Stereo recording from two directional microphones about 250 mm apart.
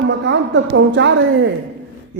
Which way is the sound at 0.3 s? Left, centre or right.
Right.